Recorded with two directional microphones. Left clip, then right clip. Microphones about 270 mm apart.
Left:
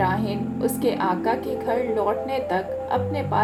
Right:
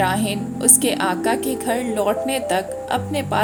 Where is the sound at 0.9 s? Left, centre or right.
Right.